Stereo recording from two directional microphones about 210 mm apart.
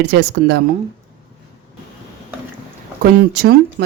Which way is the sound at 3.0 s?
45° right (ahead or behind).